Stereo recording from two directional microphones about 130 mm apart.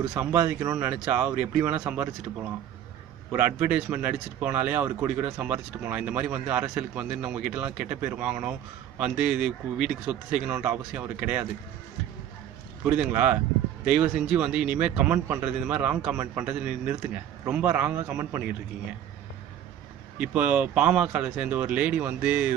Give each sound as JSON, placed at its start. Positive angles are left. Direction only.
{"t": 0.1, "sound": "speech", "side_deg": -15}
{"t": 0.8, "sound": "speech", "side_deg": -15}
{"t": 3.3, "sound": "speech", "side_deg": -15}
{"t": 13.0, "sound": "speech", "side_deg": -10}
{"t": 20.1, "sound": "speech", "side_deg": -10}